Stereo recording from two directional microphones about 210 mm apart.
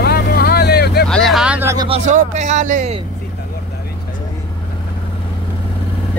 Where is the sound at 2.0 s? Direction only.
35° right (ahead or behind).